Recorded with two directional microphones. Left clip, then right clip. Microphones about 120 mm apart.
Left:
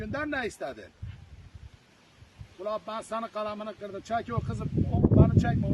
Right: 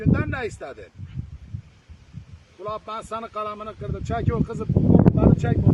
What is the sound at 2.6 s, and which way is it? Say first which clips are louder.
Speech: right 3 dB; 20° left (ahead or behind).